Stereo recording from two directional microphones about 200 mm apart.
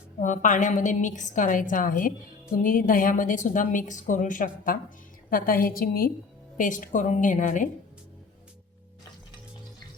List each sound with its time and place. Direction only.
0.2 s a woman's voice: 40° left (ahead or behind)